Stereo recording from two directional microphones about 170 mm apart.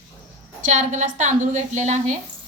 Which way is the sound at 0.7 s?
45° right (ahead or behind).